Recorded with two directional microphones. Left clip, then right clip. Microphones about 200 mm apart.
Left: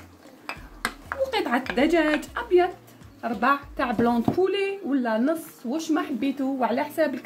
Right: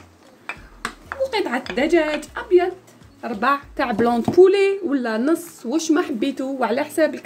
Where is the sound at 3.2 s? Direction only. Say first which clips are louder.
Right 3 dB; 25° right (ahead or behind).